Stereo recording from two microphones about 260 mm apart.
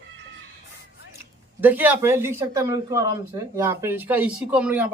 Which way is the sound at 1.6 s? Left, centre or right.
Centre.